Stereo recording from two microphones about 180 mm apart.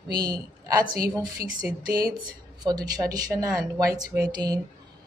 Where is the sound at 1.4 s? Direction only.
30° left (ahead or behind).